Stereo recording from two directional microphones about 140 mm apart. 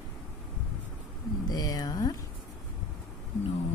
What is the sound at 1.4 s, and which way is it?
Speech, 25° left (ahead or behind).